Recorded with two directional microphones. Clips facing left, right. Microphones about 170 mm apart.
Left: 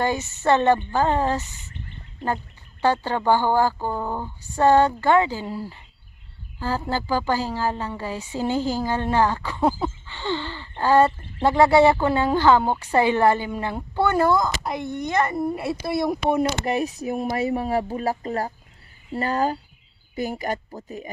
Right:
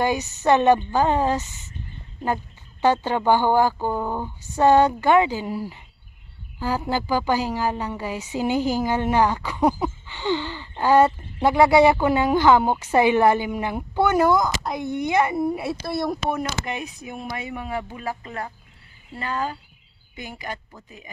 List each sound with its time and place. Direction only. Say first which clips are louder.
0.0 s a woman's voice: right 1 dB; 15° right (ahead or behind)
6.9 s a woman's voice: right 1 dB; 15° right (ahead or behind)
14.6 s speech: even; centre (ahead or behind)
14.9 s speech: right 3 dB; 10° right (ahead or behind)
15.8 s speech: left 2 dB; 15° left (ahead or behind)
16.4 s speech: left 6 dB; 35° left (ahead or behind)